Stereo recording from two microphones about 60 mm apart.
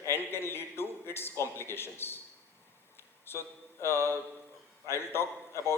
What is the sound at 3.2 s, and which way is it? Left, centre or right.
Mantra, left.